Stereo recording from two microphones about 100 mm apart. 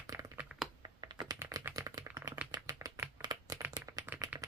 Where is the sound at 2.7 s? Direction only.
30° right (ahead or behind).